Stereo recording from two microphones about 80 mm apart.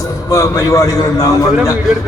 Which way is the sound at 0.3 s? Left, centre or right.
Left.